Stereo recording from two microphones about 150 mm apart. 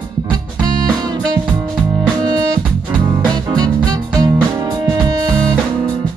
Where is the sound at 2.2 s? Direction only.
25° right (ahead or behind).